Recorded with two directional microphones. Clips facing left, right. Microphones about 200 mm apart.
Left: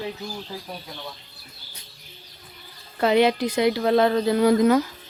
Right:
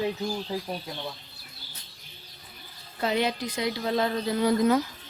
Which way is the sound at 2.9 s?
70° left (ahead or behind).